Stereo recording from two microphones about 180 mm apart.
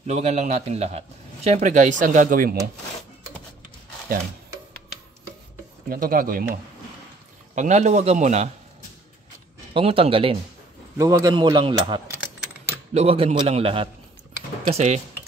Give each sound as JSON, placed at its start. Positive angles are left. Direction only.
{"t": 0.0, "sound": "a man's voice", "side_deg": -35}
{"t": 5.9, "sound": "speech", "side_deg": -50}
{"t": 7.5, "sound": "a man's voice", "side_deg": -40}
{"t": 9.8, "sound": "a man's voice", "side_deg": -30}
{"t": 11.0, "sound": "a man's voice", "side_deg": -20}